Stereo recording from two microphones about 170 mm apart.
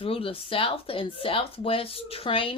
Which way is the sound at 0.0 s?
35° left (ahead or behind).